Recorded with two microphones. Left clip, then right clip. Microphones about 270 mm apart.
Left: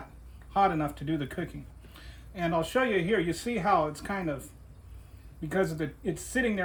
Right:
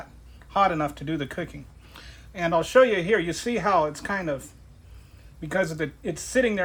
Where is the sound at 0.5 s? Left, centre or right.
Right.